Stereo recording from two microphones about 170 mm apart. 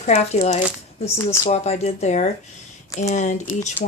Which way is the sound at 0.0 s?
40° left (ahead or behind).